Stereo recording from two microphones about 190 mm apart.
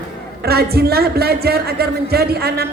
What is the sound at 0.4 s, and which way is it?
Speech, 55° right (ahead or behind).